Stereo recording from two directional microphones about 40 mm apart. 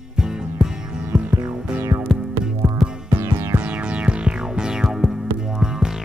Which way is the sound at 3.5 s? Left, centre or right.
Right.